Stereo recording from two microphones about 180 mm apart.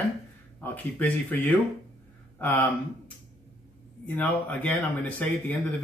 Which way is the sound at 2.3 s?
10° left (ahead or behind).